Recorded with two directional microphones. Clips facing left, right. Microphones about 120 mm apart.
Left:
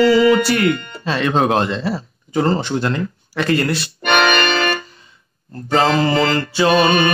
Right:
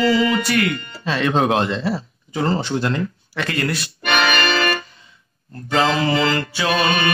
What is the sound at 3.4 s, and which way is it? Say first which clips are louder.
Organ: left 5 dB; 35° left (ahead or behind).